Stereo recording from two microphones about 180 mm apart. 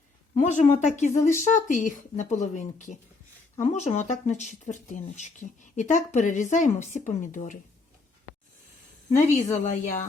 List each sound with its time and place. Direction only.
0.3 s a woman's voice: 40° left (ahead or behind)
9.3 s speech: 40° left (ahead or behind)